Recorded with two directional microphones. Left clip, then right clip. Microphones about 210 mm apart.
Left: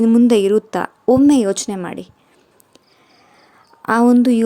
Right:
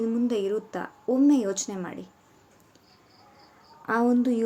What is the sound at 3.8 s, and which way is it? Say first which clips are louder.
Speech: left 10 dB; 50° left (ahead or behind).